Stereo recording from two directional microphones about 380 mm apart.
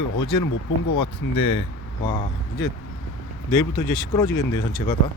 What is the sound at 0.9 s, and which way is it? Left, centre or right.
Speech, centre.